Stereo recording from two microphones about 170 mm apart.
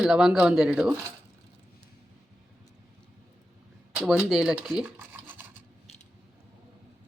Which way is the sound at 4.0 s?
Centre (ahead or behind).